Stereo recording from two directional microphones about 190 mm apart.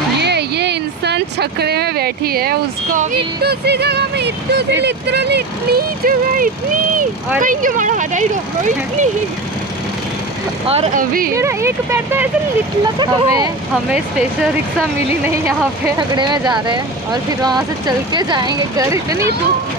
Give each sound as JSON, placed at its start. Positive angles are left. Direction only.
{"t": 0.2, "sound": "speech", "side_deg": -60}
{"t": 10.7, "sound": "speech", "side_deg": -35}
{"t": 11.3, "sound": "speech", "side_deg": -15}
{"t": 13.8, "sound": "speech", "side_deg": -5}
{"t": 16.0, "sound": "speech", "side_deg": -25}